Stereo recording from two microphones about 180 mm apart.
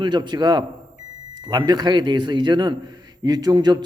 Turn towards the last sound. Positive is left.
turn(degrees=-25)  # may be behind; listen again after turning